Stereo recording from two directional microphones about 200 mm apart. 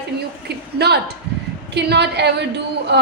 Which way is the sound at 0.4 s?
55° right (ahead or behind).